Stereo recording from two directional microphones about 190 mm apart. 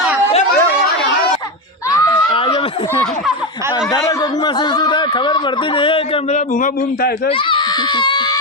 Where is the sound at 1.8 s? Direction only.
15° left (ahead or behind).